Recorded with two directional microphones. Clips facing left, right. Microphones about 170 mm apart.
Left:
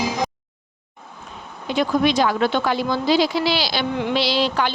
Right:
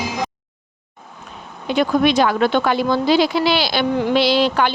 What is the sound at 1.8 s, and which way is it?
Speech, 60° right (ahead or behind).